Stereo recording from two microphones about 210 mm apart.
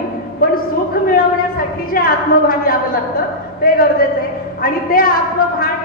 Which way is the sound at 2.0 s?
45° left (ahead or behind).